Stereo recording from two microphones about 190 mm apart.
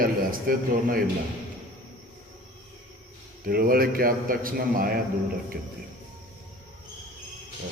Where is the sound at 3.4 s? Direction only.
50° right (ahead or behind).